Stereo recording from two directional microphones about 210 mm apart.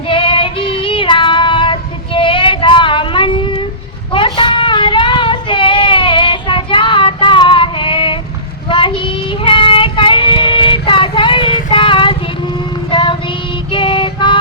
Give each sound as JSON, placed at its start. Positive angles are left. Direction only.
{"t": 0.1, "sound": "child singing", "side_deg": 25}
{"t": 12.9, "sound": "music", "side_deg": 20}